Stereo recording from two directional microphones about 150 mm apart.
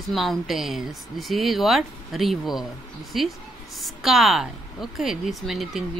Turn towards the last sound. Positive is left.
turn(degrees=0)  # may be behind; listen again after turning